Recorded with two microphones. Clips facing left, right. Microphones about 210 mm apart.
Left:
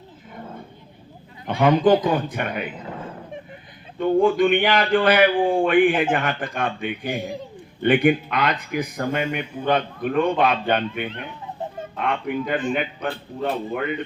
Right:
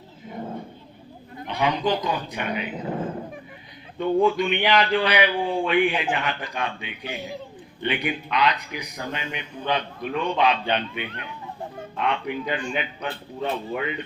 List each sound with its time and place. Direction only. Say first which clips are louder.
1.5 s a man's voice: left 7 dB; 50° left (ahead or behind)
4.3 s a man's voice: left 4 dB; 50° left (ahead or behind)
9.2 s a man's voice: left 7 dB; 10° left (ahead or behind)
9.6 s a man's voice: left 5 dB; 50° left (ahead or behind)